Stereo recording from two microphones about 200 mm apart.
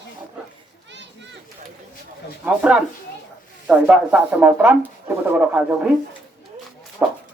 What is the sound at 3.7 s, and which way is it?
Speech, 5° right (ahead or behind).